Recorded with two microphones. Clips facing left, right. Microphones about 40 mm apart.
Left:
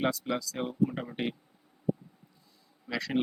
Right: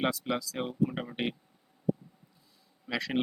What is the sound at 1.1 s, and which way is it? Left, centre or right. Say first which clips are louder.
Speech: even; centre.